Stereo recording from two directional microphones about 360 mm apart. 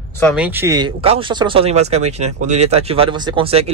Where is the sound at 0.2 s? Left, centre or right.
Centre.